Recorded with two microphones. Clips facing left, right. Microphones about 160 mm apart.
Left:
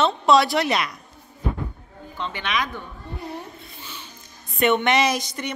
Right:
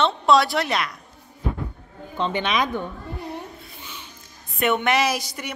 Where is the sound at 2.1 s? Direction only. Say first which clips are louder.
Right 4 dB; 20° right (ahead or behind).